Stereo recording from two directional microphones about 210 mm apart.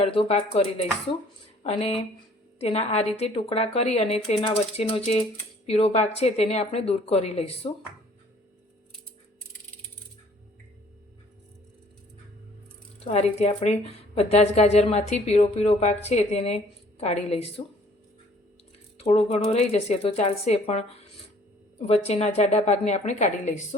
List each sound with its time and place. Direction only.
0.0 s speech: 25° left (ahead or behind)
13.1 s a woman's voice: 30° left (ahead or behind)
18.9 s a woman's voice: 30° left (ahead or behind)